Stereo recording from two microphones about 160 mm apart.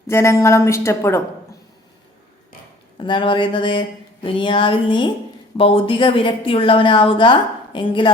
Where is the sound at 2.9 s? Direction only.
30° left (ahead or behind).